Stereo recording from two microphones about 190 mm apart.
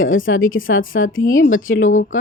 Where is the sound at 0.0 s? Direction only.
90° left.